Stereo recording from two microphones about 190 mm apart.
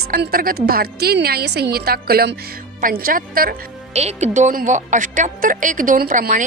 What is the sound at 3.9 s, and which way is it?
A woman's voice, 35° right (ahead or behind).